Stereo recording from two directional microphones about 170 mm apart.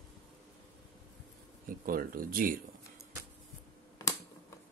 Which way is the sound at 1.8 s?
60° right (ahead or behind).